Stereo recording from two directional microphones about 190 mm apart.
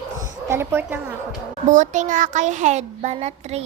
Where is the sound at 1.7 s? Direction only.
40° right (ahead or behind).